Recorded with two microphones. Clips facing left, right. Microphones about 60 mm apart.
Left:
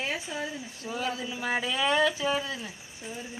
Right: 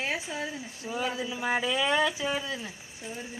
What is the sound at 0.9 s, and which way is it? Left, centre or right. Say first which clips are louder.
Speech: right 1 dB; right.